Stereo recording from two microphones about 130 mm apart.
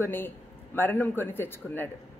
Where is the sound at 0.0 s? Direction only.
15° left (ahead or behind).